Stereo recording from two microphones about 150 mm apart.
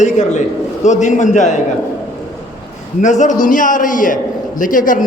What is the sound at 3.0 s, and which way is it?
A man's voice, 55° left (ahead or behind).